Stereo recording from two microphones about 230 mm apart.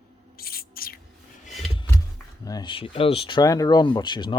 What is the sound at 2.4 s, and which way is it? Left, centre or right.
Speech, centre.